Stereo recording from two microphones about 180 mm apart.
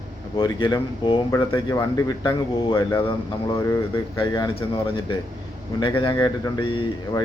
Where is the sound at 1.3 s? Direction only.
15° left (ahead or behind).